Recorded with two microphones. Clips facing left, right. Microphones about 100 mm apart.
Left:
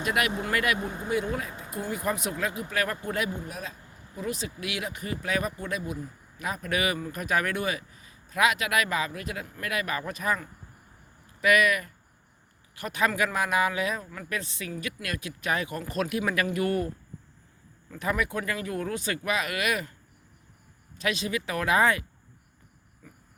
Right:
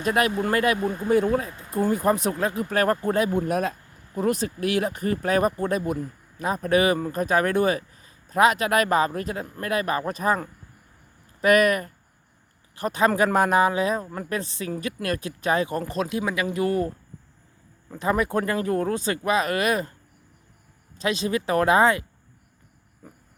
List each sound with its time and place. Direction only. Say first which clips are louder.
0.0 s speech: right 5 dB; 35° right (ahead or behind)
0.8 s speech: right 7 dB; 20° left (ahead or behind)
1.0 s speech: right 9 dB; 40° right (ahead or behind)
3.3 s speech: right 13 dB; 60° right (ahead or behind)
6.4 s speech: right 8 dB; 35° right (ahead or behind)
17.9 s speech: right 6 dB; 30° right (ahead or behind)
21.0 s speech: right 5 dB; 30° right (ahead or behind)